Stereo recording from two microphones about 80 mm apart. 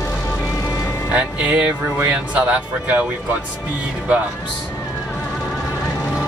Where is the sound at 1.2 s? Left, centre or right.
Centre.